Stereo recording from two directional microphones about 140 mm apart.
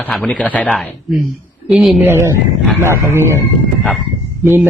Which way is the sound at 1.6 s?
5° right (ahead or behind).